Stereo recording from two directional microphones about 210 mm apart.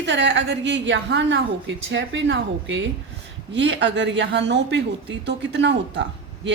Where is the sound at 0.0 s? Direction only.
55° right (ahead or behind).